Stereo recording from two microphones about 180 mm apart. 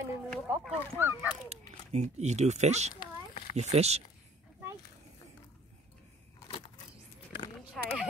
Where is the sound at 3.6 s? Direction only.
35° right (ahead or behind).